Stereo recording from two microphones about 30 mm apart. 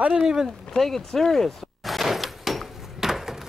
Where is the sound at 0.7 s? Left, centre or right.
Centre.